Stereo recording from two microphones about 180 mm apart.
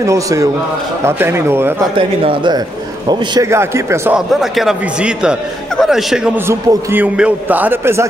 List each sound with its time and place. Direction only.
0.0 s a man's voice: 15° right (ahead or behind)
2.0 s a man's voice: 25° right (ahead or behind)
4.3 s speech: centre (ahead or behind)